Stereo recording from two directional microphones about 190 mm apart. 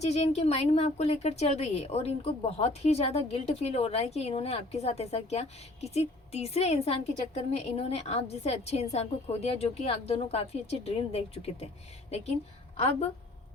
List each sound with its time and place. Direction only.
0.0 s a woman's voice: 35° left (ahead or behind)
12.7 s a woman's voice: 35° left (ahead or behind)